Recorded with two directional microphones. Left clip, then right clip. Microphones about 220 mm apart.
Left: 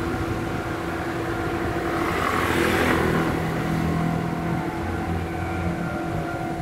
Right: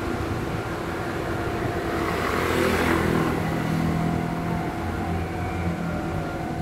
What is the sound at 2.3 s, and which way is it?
Vehicle, 40° left (ahead or behind).